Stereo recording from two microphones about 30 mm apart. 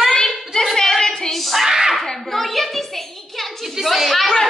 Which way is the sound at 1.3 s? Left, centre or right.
Centre.